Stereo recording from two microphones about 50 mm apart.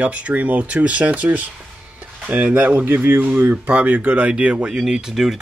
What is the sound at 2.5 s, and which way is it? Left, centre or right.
Speech, right.